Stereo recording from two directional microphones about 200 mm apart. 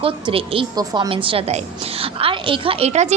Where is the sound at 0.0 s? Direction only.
25° right (ahead or behind).